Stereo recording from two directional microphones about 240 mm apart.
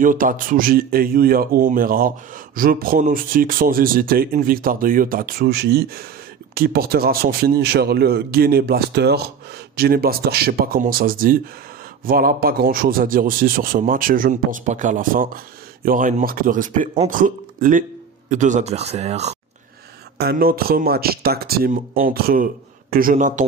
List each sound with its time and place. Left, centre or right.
0.0 s speech: right
20.2 s speech: right